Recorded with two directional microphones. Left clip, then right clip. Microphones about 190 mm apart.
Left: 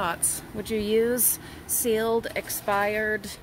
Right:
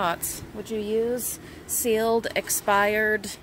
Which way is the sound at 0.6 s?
25° left (ahead or behind).